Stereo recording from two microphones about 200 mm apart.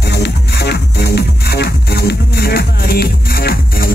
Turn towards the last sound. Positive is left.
turn(degrees=50)  # may be behind; listen again after turning